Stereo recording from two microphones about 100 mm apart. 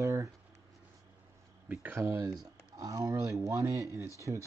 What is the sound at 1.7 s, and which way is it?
Speech, 15° right (ahead or behind).